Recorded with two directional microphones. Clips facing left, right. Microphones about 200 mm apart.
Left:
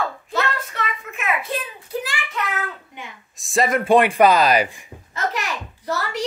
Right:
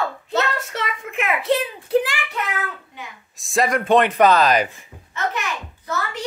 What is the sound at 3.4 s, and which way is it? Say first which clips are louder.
Speech: even; centre (ahead or behind).